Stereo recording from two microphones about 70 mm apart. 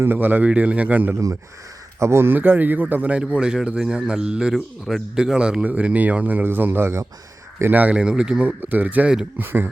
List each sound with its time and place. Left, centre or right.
0.0 s speech: right
2.0 s speech: right
7.7 s speech: right